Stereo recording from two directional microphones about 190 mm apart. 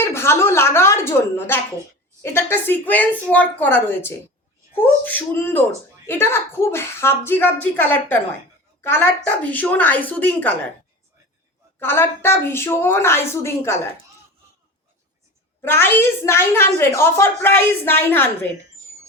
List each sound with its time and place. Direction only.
0.0 s a woman's voice: 15° left (ahead or behind)
11.8 s a woman's voice: 10° left (ahead or behind)
15.6 s a woman's voice: 10° left (ahead or behind)